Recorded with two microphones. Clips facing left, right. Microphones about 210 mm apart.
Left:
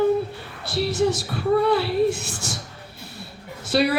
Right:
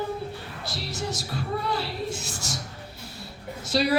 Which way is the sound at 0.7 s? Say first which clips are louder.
Left 12 dB; 60° left (ahead or behind).